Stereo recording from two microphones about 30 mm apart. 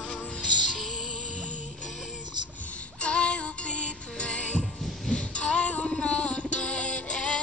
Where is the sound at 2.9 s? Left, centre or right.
Left.